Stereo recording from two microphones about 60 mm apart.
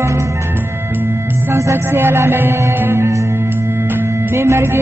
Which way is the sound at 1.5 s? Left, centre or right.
Right.